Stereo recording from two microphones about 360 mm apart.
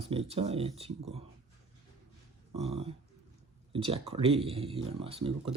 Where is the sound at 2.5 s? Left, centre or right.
Centre.